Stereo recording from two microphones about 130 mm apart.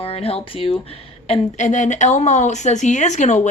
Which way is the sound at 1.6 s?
65° left (ahead or behind).